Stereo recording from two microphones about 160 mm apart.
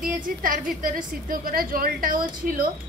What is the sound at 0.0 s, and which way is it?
A woman's voice, 60° right (ahead or behind).